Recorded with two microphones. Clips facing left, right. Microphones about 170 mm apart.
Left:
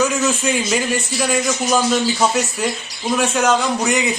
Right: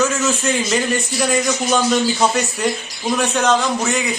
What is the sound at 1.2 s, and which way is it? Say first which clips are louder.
A man's voice: right 1 dB; centre (ahead or behind).